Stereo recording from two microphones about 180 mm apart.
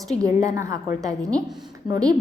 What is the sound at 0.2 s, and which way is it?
A woman's voice, 20° right (ahead or behind).